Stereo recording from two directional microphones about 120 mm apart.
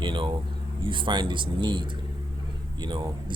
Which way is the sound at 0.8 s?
45° right (ahead or behind).